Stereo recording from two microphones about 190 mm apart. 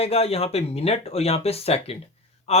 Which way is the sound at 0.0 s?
30° left (ahead or behind).